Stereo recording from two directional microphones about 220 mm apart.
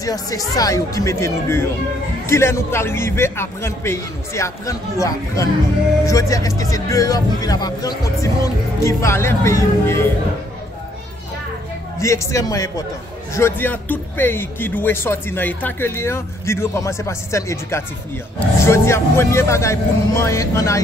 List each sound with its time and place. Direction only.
0.0 s speech: 15° left (ahead or behind)
12.0 s speech: 15° left (ahead or behind)